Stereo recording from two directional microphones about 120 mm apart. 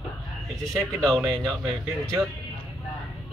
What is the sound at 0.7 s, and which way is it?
Speech, centre (ahead or behind).